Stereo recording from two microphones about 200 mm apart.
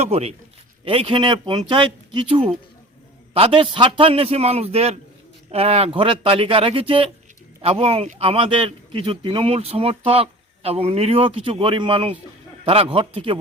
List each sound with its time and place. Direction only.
0.0 s a man's voice: 30° right (ahead or behind)